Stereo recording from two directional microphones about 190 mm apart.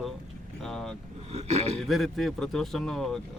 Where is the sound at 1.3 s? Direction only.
35° right (ahead or behind).